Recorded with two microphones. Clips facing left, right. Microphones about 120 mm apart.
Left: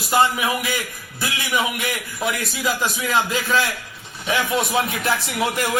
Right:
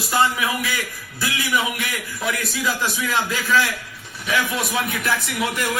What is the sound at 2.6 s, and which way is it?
A man's voice, 20° left (ahead or behind).